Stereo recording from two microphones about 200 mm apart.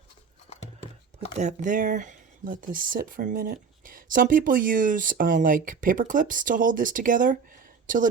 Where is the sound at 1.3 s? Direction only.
35° right (ahead or behind).